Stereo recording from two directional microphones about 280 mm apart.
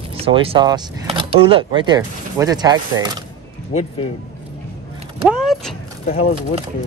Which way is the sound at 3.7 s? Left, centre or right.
Centre.